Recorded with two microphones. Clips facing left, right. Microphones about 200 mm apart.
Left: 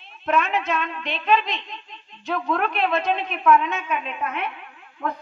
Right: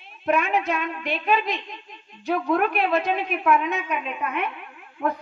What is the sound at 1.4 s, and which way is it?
Speech, 50° right (ahead or behind).